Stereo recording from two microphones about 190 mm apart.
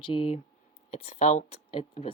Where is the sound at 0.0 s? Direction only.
25° left (ahead or behind).